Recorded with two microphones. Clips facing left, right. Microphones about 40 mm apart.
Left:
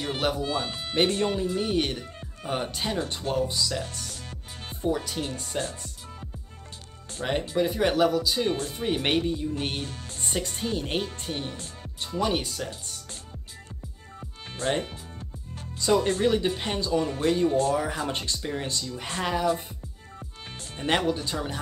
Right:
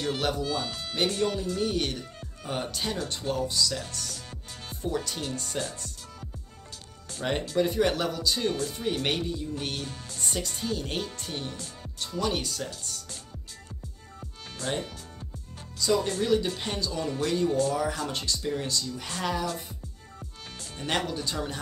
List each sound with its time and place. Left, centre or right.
0.0 s speech: centre
7.2 s speech: centre
8.6 s speech: left
14.5 s speech: left; by 21.5 s centre